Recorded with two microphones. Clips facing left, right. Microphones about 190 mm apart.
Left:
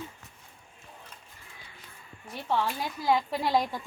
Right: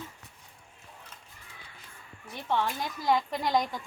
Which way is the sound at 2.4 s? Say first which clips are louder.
Left 1 dB; 5° left (ahead or behind).